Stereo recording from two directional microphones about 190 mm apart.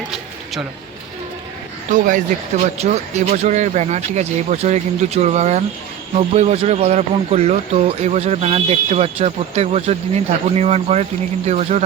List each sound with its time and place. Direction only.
1.9 s speech: 45° right (ahead or behind)